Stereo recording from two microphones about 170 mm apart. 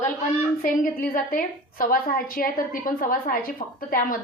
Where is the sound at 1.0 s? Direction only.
55° left (ahead or behind).